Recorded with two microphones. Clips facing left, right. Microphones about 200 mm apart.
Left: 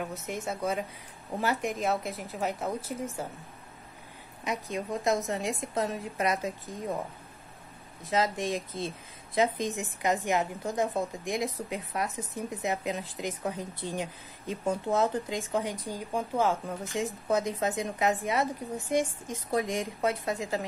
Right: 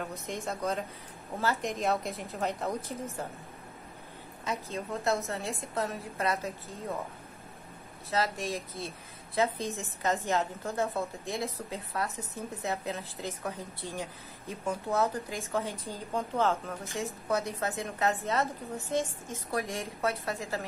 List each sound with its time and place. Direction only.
0.5 s a woman's voice: 5° left (ahead or behind)
1.3 s a woman's voice: 15° left (ahead or behind)
1.7 s a woman's voice: centre (ahead or behind)
4.5 s a woman's voice: 15° left (ahead or behind)
8.1 s a woman's voice: 15° left (ahead or behind)